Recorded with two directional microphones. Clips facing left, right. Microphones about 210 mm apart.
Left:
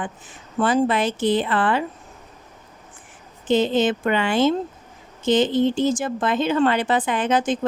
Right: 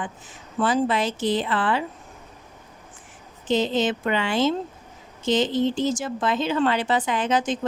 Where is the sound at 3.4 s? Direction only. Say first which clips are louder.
Left 3 dB; 55° left (ahead or behind).